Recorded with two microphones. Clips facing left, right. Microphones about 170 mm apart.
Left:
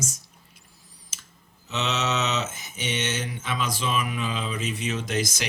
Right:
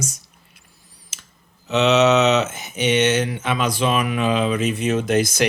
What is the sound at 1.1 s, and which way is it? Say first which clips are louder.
Clicking: right 3 dB; 70° right (ahead or behind).